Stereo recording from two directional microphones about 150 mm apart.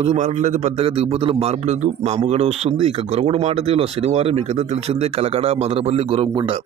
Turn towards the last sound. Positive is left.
turn(degrees=-35)  # may be behind; listen again after turning